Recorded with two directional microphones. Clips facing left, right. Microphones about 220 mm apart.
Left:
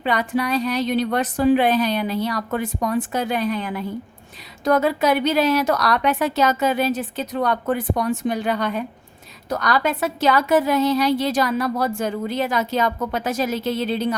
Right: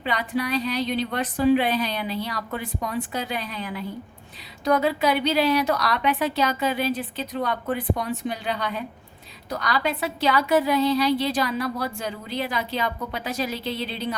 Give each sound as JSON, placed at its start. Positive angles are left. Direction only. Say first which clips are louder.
{"t": 0.0, "sound": "a woman's voice", "louder": "left 4 dB", "side_deg": 50}